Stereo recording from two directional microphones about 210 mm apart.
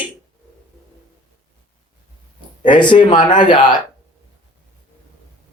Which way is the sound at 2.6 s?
20° left (ahead or behind).